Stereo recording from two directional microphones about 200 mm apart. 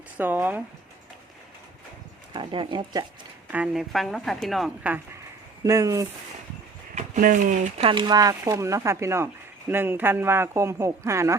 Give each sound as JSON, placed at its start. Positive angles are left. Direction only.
{"t": 0.2, "sound": "speech", "side_deg": -10}
{"t": 2.3, "sound": "speech", "side_deg": -25}
{"t": 3.5, "sound": "a woman's voice", "side_deg": -5}
{"t": 5.6, "sound": "speech", "side_deg": -15}
{"t": 6.9, "sound": "speech", "side_deg": -40}